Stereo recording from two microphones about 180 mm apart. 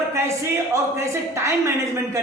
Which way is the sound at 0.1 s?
15° right (ahead or behind).